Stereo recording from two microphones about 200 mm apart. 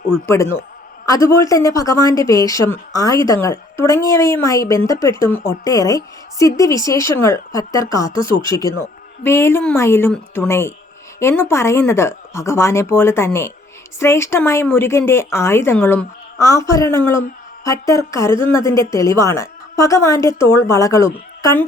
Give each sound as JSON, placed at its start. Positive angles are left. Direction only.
{"t": 1.0, "sound": "a woman's voice", "side_deg": 15}